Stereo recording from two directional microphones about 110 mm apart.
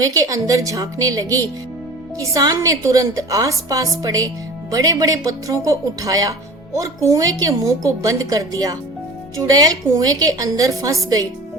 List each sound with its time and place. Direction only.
0.0 s a woman's voice: 30° right (ahead or behind)